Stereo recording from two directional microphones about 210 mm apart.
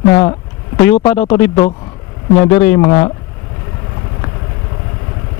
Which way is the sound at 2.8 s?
25° left (ahead or behind).